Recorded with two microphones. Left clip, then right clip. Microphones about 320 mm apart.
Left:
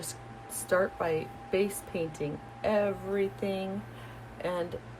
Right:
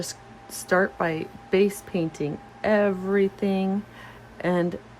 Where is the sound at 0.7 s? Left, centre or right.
Right.